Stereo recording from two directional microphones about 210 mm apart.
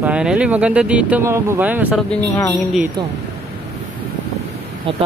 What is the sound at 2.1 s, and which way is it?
Speech, 10° left (ahead or behind).